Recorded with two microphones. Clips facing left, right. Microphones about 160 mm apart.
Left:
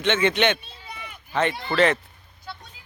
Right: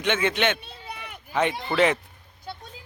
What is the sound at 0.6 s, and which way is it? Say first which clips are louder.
Run: right 2 dB; 65° right (ahead or behind).